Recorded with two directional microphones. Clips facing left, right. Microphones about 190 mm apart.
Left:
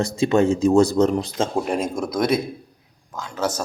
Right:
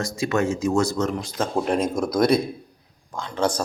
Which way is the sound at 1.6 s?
5° left (ahead or behind).